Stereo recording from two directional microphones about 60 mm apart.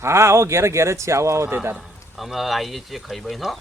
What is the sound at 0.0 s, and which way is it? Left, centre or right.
Speech, right.